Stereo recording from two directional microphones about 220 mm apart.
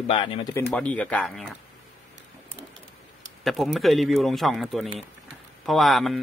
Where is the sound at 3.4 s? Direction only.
Centre (ahead or behind).